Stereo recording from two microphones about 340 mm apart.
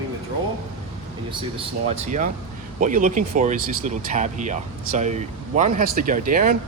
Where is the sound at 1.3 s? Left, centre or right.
Centre.